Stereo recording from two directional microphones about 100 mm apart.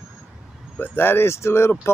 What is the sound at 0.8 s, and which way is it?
Speech, 20° left (ahead or behind).